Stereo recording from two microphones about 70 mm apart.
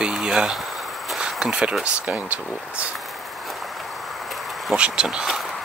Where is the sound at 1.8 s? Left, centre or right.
Centre.